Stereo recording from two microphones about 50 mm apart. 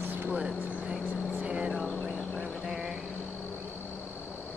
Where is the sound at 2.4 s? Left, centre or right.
Centre.